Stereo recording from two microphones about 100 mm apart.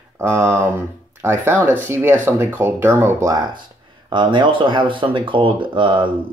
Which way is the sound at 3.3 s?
45° right (ahead or behind).